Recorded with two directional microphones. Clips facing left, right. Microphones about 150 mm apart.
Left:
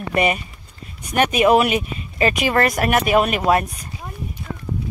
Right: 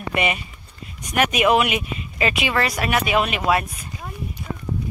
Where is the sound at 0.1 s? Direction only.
40° left (ahead or behind).